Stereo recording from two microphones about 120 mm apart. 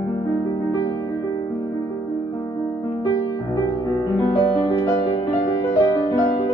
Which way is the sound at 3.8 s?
35° left (ahead or behind).